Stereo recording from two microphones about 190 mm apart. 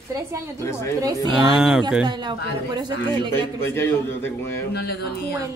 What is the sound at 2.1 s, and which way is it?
A woman's voice, 25° right (ahead or behind).